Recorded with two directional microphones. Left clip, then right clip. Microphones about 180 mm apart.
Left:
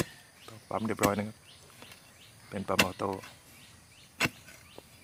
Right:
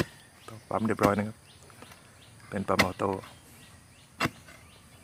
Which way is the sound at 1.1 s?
Centre (ahead or behind).